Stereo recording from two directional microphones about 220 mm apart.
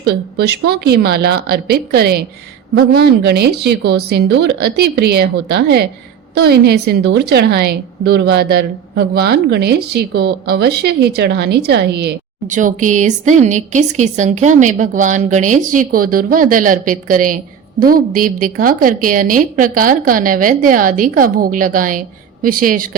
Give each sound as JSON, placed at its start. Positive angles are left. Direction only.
{"t": 0.0, "sound": "a woman's voice", "side_deg": -45}
{"t": 12.5, "sound": "a woman's voice", "side_deg": -35}